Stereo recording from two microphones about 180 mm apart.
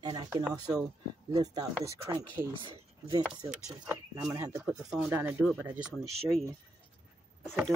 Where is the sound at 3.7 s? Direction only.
10° right (ahead or behind).